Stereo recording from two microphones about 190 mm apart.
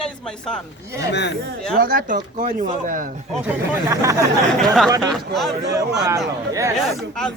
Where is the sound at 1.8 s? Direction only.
50° right (ahead or behind).